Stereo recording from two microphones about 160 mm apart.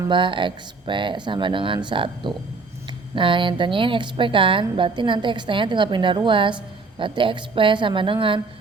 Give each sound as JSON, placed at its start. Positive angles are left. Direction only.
{"t": 0.1, "sound": "a woman's voice", "side_deg": -30}